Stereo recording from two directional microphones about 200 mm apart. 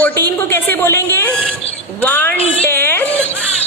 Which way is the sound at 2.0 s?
10° left (ahead or behind).